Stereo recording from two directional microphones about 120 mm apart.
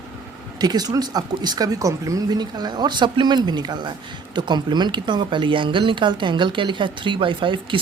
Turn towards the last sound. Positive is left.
turn(degrees=-45)  # may be behind; listen again after turning